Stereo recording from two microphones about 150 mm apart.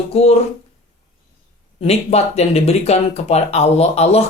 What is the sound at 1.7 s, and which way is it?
Speech, 45° left (ahead or behind).